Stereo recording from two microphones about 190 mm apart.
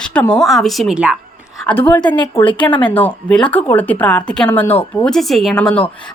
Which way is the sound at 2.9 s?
10° left (ahead or behind).